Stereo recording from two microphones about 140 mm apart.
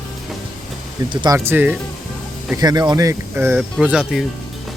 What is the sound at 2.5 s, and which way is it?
Speech, 30° right (ahead or behind).